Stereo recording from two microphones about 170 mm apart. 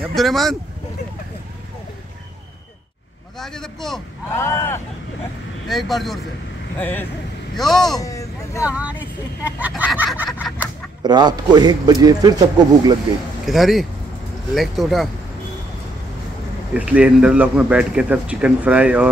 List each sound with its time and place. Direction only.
0.1 s a man's voice: centre (ahead or behind)
3.3 s a man's voice: 5° left (ahead or behind)
4.3 s speech: 15° left (ahead or behind)
5.7 s a man's voice: centre (ahead or behind)
8.0 s vehicle: 20° left (ahead or behind)
8.6 s a man's voice: 10° right (ahead or behind)
9.4 s a sound: 10° right (ahead or behind)
11.0 s a man's voice: 25° right (ahead or behind)
13.5 s a man's voice: centre (ahead or behind)
16.7 s a man's voice: 5° right (ahead or behind)